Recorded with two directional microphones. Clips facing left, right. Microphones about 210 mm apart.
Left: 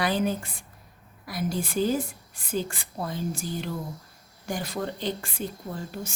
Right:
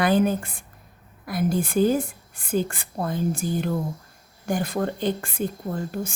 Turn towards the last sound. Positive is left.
turn(degrees=-50)  # may be behind; listen again after turning